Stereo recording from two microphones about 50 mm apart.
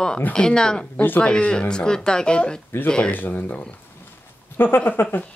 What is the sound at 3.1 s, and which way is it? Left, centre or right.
Speech, left.